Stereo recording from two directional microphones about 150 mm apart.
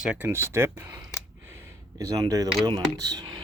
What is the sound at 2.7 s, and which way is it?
Speech, 25° right (ahead or behind).